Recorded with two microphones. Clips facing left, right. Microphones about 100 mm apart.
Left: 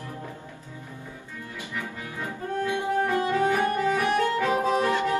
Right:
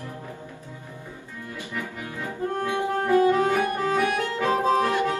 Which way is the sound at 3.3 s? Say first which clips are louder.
Right 2 dB; 20° right (ahead or behind).